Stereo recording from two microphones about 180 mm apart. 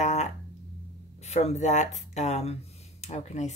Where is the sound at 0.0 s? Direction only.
40° left (ahead or behind).